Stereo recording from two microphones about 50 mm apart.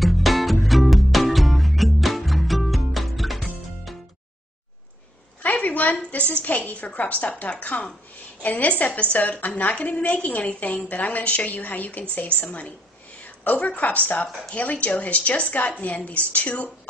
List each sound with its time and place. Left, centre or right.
0.0 s music: centre
5.4 s a woman's voice: left